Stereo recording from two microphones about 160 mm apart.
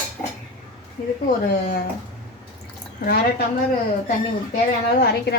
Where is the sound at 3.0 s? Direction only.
75° left (ahead or behind).